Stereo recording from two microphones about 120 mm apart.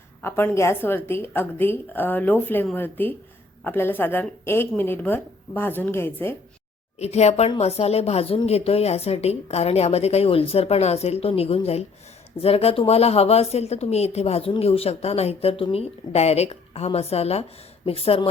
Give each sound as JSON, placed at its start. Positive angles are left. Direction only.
{"t": 0.2, "sound": "speech", "side_deg": 20}
{"t": 7.0, "sound": "a woman's voice", "side_deg": 65}